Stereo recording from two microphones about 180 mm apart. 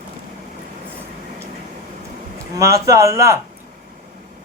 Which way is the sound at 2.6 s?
15° right (ahead or behind).